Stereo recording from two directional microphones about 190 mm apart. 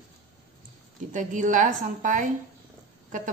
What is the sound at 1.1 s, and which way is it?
A woman's voice, 40° right (ahead or behind).